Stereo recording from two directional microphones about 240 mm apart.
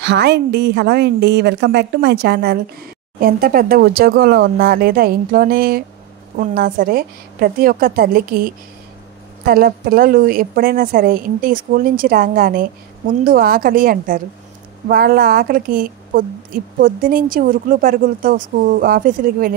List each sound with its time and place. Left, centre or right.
0.0 s a woman's voice: right